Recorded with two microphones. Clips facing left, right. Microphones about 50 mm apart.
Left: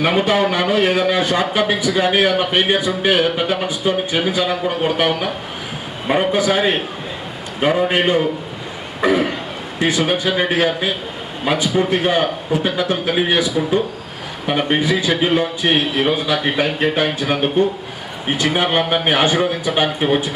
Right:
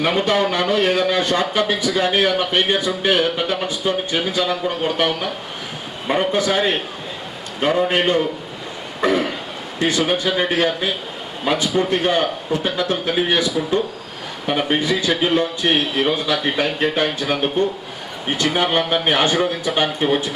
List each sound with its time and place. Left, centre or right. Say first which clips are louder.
0.0 s a man's voice: left 2 dB; centre
9.0 s throat clearing: left 2 dB; centre
9.8 s a man's voice: left 1 dB; centre